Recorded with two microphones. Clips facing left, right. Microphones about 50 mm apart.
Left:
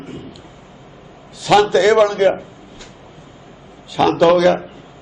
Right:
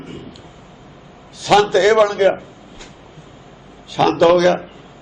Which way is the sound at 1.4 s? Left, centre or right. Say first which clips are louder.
Even; centre.